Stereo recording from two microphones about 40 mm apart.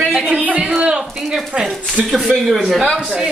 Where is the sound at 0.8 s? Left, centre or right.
Right.